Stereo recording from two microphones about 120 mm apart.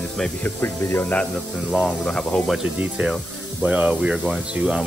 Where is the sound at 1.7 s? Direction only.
5° left (ahead or behind).